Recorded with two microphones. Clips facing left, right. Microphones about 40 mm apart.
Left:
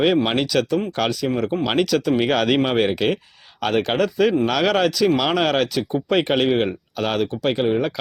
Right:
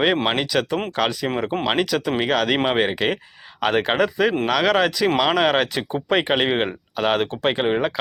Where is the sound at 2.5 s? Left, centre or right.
Centre.